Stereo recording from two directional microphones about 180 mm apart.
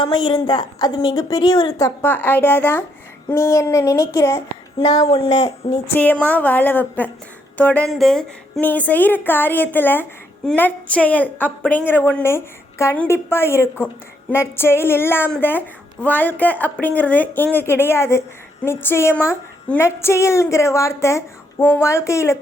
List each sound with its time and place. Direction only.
0.0 s a woman's voice: 25° left (ahead or behind)
5.0 s speech: 30° left (ahead or behind)
5.9 s a woman's voice: 10° left (ahead or behind)